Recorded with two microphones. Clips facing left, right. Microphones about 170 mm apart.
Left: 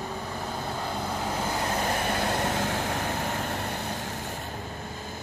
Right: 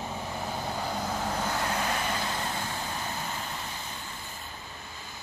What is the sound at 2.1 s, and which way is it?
Vehicle, 60° left (ahead or behind).